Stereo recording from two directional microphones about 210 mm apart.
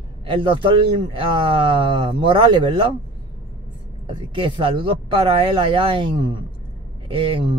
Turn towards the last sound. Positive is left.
turn(degrees=-25)  # may be behind; listen again after turning